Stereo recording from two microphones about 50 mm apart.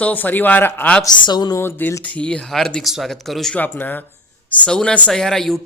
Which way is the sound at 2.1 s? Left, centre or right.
Left.